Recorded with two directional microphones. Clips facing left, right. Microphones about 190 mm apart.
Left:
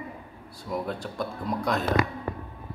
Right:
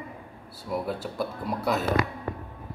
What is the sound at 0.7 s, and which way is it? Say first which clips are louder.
Speech: right 1 dB; 5° right (ahead or behind).